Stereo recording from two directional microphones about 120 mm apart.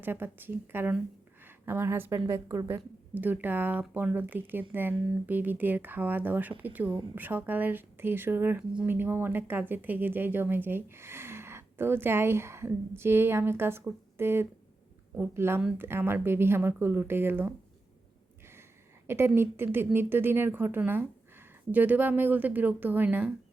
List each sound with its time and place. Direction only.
0.0 s a woman's voice: 15° right (ahead or behind)
19.0 s a woman's voice: 20° right (ahead or behind)